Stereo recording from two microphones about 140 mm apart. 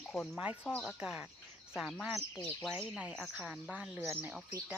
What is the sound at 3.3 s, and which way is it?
Speech, 10° right (ahead or behind).